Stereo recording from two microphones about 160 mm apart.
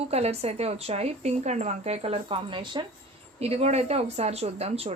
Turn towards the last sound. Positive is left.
turn(degrees=-40)  # may be behind; listen again after turning